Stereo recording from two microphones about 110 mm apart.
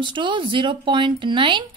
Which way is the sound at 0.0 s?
45° right (ahead or behind).